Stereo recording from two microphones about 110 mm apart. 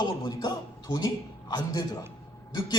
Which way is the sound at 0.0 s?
40° left (ahead or behind).